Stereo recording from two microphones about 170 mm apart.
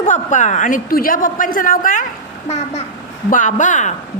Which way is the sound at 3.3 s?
50° left (ahead or behind).